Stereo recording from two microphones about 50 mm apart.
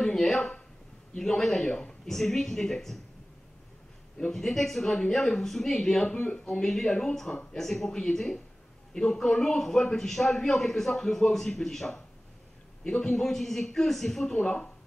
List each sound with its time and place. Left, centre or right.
0.2 s a man's voice: centre
1.7 s speech: centre
2.0 s a man's voice: centre
4.3 s a man's voice: centre
6.0 s speech: left
6.4 s a man's voice: centre
13.1 s a man's voice: centre
14.4 s speech: left